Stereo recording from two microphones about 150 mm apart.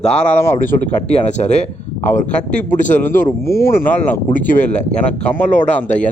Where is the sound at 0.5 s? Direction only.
50° left (ahead or behind); by 3.9 s 85° left.